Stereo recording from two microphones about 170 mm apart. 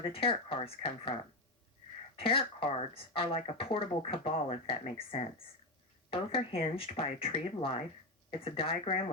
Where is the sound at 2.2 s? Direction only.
30° left (ahead or behind).